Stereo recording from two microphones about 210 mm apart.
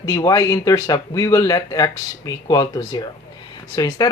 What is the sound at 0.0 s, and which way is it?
Speech, 15° left (ahead or behind).